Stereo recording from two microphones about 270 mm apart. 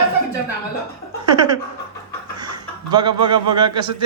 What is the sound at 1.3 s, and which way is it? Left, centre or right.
A man's voice, centre.